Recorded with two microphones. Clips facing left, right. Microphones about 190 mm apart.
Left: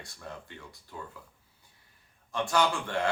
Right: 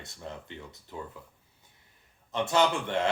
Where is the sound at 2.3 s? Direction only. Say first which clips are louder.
Right 2 dB; 20° right (ahead or behind).